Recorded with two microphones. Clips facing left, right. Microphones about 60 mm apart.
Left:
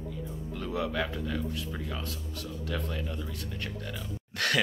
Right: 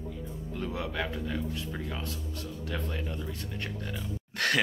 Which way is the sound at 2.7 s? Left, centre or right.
Centre.